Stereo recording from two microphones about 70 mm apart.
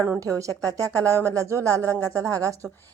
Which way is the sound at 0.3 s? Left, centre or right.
Right.